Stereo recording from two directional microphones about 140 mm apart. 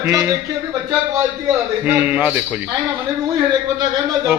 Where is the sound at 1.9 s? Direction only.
15° right (ahead or behind).